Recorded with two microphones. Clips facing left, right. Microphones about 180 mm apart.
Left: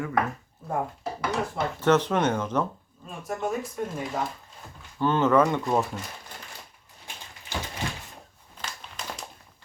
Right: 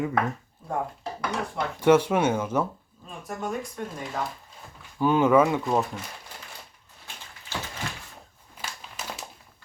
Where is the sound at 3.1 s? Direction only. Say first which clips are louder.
Left 2 dB; centre (ahead or behind).